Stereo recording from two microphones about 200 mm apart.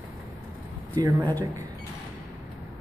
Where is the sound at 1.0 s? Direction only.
20° right (ahead or behind).